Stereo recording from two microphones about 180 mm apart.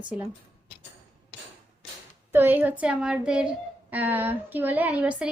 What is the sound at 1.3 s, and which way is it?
Hammer, 65° left (ahead or behind).